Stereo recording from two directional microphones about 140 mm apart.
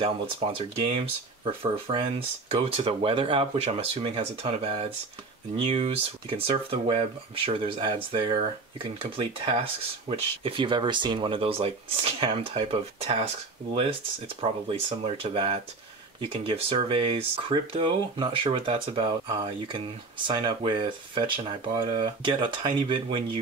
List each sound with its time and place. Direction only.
0.0 s speech: 40° right (ahead or behind)